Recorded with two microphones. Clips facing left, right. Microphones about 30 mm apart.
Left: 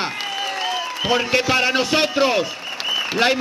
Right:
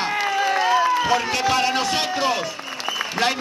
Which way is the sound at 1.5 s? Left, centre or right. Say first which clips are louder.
Left 2 dB; centre.